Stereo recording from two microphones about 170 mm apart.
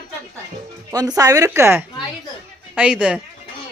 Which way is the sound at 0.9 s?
20° right (ahead or behind).